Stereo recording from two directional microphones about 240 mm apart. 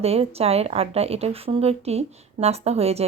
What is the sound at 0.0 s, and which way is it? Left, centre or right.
A woman's voice, right.